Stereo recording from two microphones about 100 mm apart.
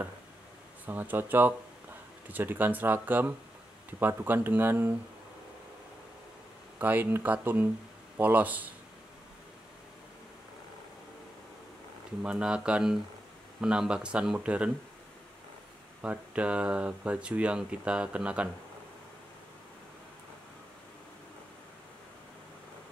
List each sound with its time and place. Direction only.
0.8 s speech: 20° right (ahead or behind)
6.8 s speech: 20° right (ahead or behind)
12.2 s speech: 10° right (ahead or behind)
16.0 s speech: 15° right (ahead or behind)